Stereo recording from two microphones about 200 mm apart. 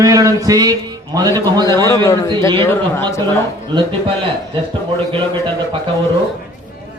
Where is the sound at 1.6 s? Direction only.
15° left (ahead or behind).